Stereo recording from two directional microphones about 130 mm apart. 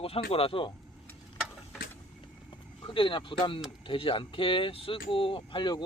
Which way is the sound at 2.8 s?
40° left (ahead or behind).